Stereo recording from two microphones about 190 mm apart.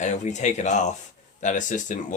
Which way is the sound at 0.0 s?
40° left (ahead or behind).